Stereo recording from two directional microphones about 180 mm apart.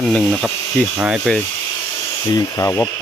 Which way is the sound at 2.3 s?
15° left (ahead or behind).